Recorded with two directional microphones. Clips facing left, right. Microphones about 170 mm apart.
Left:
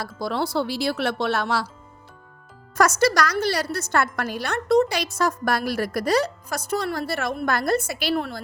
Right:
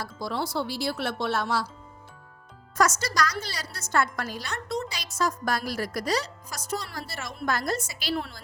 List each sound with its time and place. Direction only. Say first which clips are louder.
0.0 s speech: left 5 dB; 70° left (ahead or behind)
2.7 s a woman's voice: left 6 dB; 65° left (ahead or behind)